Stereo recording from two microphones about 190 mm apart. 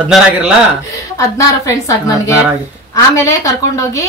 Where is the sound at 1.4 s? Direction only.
15° left (ahead or behind).